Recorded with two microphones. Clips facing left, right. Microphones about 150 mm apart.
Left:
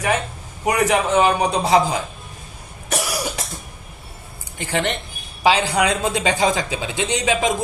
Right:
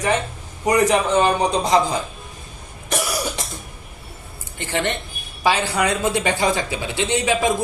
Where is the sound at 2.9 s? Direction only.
10° left (ahead or behind).